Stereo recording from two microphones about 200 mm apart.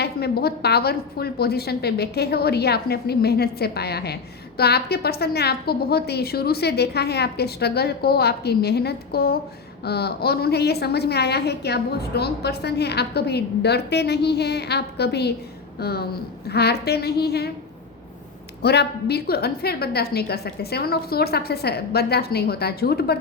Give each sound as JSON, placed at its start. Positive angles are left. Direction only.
{"t": 0.0, "sound": "a woman's voice", "side_deg": 50}
{"t": 18.6, "sound": "a woman's voice", "side_deg": 55}